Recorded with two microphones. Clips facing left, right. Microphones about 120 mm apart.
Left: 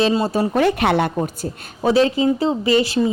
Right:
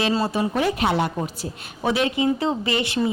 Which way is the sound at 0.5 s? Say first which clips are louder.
Left 6 dB; 65° left (ahead or behind).